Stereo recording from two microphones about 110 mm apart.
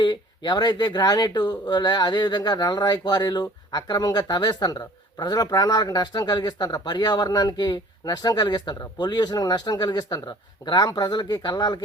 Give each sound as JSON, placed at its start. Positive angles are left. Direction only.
{"t": 0.0, "sound": "speech", "side_deg": 40}